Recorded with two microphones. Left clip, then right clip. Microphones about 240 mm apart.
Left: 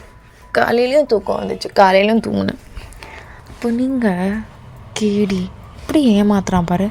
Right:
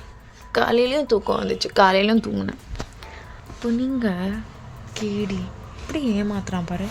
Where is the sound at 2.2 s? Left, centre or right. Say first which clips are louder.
Left 8 dB; left.